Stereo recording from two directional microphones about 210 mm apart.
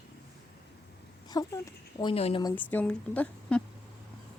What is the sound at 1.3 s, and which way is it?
A woman's voice, 15° left (ahead or behind).